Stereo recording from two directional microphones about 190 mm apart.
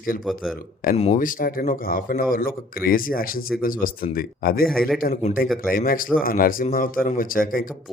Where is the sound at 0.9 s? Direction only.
35° left (ahead or behind).